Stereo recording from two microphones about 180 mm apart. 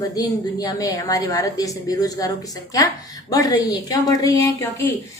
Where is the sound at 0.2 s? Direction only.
20° left (ahead or behind).